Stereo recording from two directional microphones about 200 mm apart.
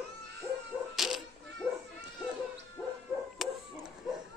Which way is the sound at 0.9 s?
Centre (ahead or behind).